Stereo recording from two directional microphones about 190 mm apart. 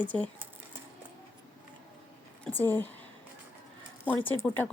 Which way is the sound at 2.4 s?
10° left (ahead or behind).